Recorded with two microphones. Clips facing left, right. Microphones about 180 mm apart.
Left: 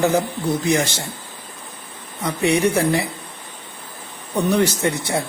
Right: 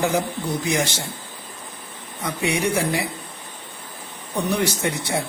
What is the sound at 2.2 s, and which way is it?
Speech, 10° right (ahead or behind).